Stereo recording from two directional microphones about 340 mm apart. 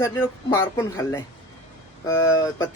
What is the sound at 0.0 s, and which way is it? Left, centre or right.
A man's voice, centre.